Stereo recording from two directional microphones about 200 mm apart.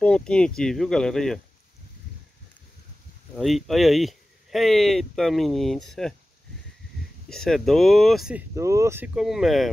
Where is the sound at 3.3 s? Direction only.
Centre (ahead or behind).